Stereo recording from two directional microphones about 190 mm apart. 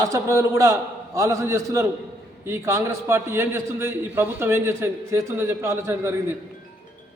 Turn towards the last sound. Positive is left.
turn(degrees=-10)  # may be behind; listen again after turning